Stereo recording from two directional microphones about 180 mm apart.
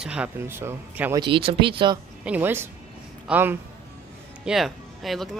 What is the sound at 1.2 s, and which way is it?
Speech, 30° right (ahead or behind).